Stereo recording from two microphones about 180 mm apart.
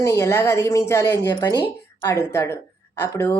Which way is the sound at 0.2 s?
15° left (ahead or behind).